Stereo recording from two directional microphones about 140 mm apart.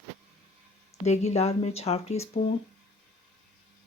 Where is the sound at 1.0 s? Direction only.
50° left (ahead or behind).